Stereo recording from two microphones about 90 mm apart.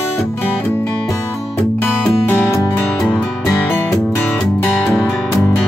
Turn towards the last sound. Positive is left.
turn(degrees=25)  # may be behind; listen again after turning